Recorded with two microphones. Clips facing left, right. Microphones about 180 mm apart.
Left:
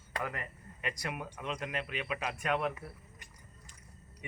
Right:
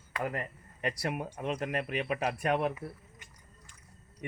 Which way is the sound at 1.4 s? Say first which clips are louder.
Right 4 dB; 50° right (ahead or behind).